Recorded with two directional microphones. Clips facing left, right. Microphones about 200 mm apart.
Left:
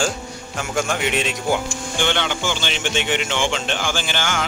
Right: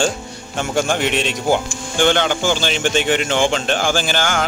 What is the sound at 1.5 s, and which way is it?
Speech, 40° right (ahead or behind).